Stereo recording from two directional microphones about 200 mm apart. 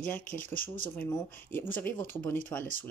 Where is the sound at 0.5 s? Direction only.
45° left (ahead or behind).